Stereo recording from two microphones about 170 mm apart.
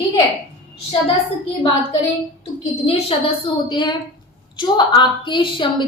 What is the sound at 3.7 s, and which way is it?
A woman's voice, 25° left (ahead or behind).